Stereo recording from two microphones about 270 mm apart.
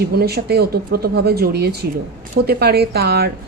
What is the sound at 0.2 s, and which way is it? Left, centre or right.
A woman's voice, right.